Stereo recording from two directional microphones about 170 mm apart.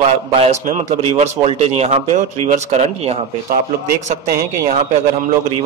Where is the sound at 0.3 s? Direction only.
40° right (ahead or behind).